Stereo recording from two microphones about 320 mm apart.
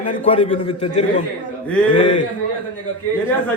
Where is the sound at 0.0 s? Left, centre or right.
Centre.